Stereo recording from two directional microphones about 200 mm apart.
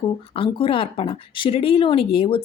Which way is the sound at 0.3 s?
25° left (ahead or behind).